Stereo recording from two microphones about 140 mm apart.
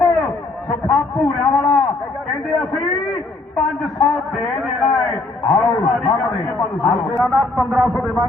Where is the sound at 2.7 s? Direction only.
25° left (ahead or behind).